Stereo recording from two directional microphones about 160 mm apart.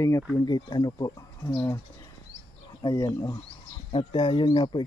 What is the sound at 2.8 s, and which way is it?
Speech, 20° left (ahead or behind).